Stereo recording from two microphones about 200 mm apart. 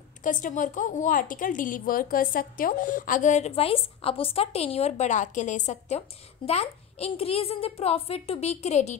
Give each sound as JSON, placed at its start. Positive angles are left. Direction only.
{"t": 0.2, "sound": "a woman's voice", "side_deg": 40}